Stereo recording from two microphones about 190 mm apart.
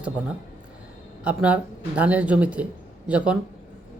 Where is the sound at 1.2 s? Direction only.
5° right (ahead or behind).